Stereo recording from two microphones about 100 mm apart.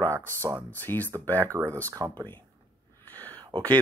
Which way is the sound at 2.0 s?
35° right (ahead or behind).